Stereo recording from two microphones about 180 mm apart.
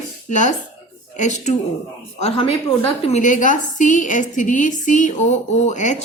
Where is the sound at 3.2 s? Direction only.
45° left (ahead or behind).